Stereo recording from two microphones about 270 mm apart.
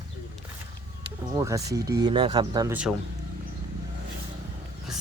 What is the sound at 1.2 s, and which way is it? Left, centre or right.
Speech, centre.